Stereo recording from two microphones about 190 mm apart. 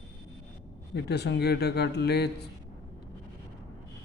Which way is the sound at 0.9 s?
60° left (ahead or behind).